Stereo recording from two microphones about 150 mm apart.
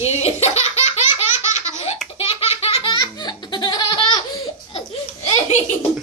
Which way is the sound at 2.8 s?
30° left (ahead or behind).